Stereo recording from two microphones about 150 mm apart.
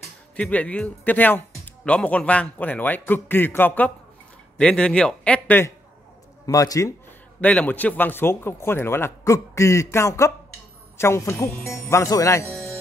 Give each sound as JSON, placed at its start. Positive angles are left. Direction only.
{"t": 0.4, "sound": "speech", "side_deg": 10}
{"t": 6.4, "sound": "speech", "side_deg": 20}
{"t": 7.3, "sound": "speech", "side_deg": 10}